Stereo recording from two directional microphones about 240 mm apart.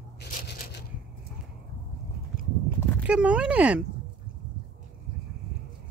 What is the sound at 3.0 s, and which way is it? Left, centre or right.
Speech, centre.